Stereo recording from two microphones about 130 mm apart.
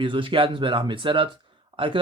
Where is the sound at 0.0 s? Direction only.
40° right (ahead or behind).